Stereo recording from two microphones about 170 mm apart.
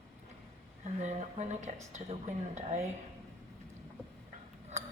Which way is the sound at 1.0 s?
45° right (ahead or behind).